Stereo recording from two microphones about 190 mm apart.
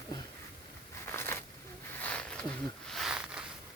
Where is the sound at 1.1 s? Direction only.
10° left (ahead or behind); by 3.4 s 5° right (ahead or behind).